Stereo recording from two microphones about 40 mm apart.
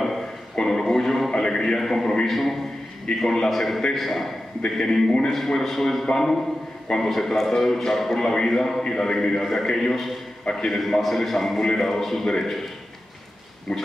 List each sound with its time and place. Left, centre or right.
0.6 s a man's voice: centre
4.7 s a man's voice: centre
10.7 s a man's voice: centre
13.7 s a man's voice: centre